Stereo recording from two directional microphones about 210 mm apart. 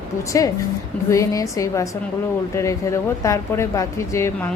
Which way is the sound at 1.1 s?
15° left (ahead or behind).